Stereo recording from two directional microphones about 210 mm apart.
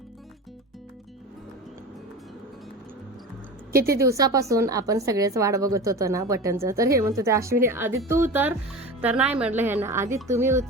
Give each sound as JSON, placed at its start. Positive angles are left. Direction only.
{"t": 3.8, "sound": "a woman's voice", "side_deg": -45}
{"t": 4.0, "sound": "a woman's voice", "side_deg": -15}